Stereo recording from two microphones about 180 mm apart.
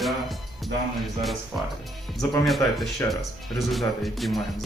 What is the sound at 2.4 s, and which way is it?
Speech, centre (ahead or behind).